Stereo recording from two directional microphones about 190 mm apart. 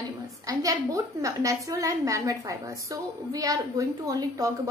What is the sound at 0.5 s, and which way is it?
A child's voice, 20° right (ahead or behind).